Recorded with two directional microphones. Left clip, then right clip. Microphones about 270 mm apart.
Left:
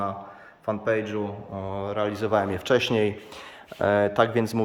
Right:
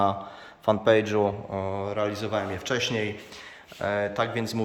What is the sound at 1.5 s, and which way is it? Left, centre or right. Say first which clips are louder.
A man's voice: even; centre.